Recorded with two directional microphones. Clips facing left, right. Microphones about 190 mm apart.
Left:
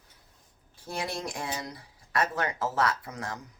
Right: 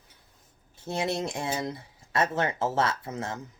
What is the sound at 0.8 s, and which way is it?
Speech, 25° right (ahead or behind).